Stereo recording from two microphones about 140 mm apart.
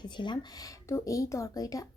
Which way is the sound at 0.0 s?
30° left (ahead or behind).